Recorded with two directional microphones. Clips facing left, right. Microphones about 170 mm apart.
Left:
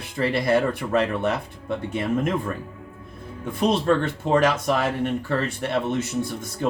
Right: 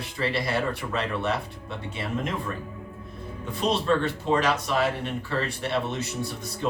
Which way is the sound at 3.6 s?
50° left (ahead or behind).